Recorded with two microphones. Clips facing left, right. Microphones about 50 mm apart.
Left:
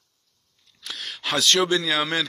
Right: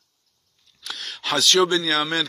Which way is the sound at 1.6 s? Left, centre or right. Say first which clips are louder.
Right 2 dB; left.